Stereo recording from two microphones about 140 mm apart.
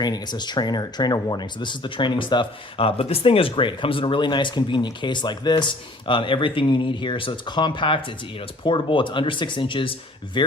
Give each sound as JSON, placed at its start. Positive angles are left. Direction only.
{"t": 0.0, "sound": "speech", "side_deg": 30}